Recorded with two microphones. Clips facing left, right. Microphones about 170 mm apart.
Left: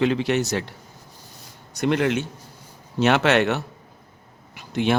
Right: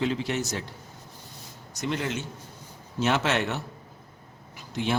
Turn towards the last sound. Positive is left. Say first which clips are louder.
# left 6 dB
turn(degrees=70)  # may be behind; listen again after turning